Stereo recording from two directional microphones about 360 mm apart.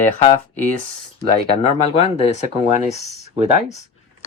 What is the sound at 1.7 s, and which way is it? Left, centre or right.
A woman's voice, centre.